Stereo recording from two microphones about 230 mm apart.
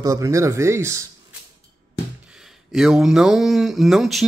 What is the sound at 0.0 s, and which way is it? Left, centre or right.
Speech, centre.